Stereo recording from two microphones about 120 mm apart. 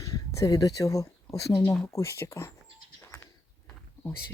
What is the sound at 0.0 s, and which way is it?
Speech, 25° left (ahead or behind).